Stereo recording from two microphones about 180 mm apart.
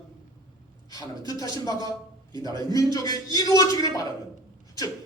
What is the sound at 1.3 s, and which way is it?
A man's voice, 20° left (ahead or behind).